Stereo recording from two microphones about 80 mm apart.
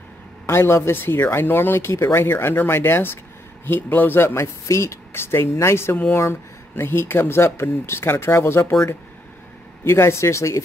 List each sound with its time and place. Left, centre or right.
0.5 s speech: left
9.8 s speech: left